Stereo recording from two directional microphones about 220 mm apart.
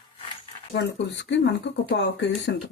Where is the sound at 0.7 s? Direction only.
55° left (ahead or behind).